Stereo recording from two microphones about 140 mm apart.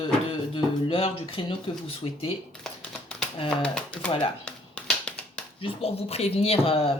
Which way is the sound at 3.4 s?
5° left (ahead or behind).